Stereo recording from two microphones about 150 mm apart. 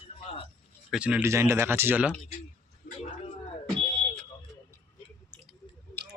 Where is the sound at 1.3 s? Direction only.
20° right (ahead or behind).